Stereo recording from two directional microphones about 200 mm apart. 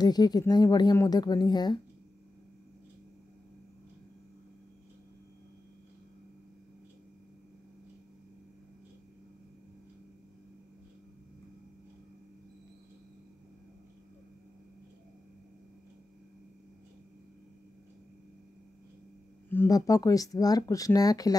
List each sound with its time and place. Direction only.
0.0 s a woman's voice: 20° left (ahead or behind)
19.5 s speech: 15° left (ahead or behind)